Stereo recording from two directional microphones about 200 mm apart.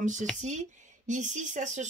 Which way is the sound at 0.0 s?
40° right (ahead or behind).